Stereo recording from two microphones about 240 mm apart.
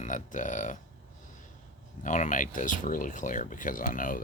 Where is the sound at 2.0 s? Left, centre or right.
Left.